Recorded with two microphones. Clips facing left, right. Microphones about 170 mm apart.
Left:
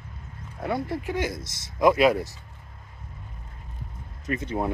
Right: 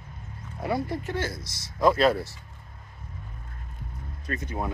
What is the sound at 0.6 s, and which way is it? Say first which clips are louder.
Speech: even; 5° right (ahead or behind).